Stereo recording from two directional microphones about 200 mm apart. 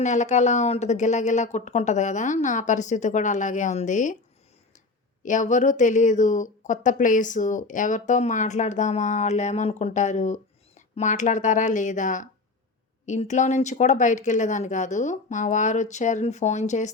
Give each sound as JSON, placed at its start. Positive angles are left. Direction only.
{"t": 0.0, "sound": "speech", "side_deg": 35}
{"t": 5.2, "sound": "speech", "side_deg": 40}